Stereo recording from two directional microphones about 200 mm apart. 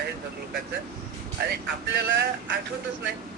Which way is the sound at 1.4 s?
55° right (ahead or behind).